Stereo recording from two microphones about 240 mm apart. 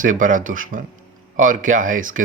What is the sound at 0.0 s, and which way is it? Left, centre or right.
Speech, right.